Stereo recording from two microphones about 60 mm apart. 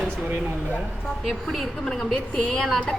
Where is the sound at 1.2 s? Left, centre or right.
Centre.